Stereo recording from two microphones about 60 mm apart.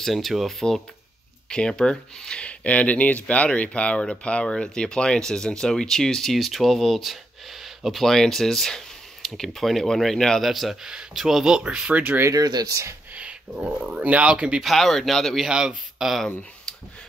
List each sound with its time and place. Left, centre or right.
0.0 s speech: centre
10.4 s speech: centre; by 12.2 s right
12.3 s speech: right
13.1 s speech: centre
14.6 s speech: centre
15.4 s speech: centre